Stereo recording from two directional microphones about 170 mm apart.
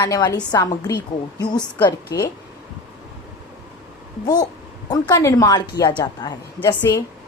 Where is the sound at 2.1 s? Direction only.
20° left (ahead or behind).